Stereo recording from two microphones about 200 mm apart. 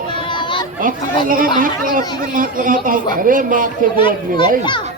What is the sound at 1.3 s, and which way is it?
Speech, 45° right (ahead or behind).